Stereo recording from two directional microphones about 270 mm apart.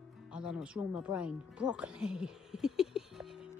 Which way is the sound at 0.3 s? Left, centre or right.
Centre.